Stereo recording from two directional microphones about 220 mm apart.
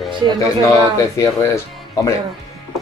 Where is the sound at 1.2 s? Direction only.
15° left (ahead or behind).